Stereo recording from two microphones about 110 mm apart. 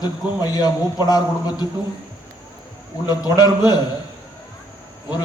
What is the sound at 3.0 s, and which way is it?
Speech, 35° left (ahead or behind).